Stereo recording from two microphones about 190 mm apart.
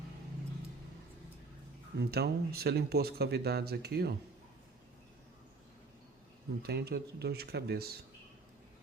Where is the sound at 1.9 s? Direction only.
55° right (ahead or behind).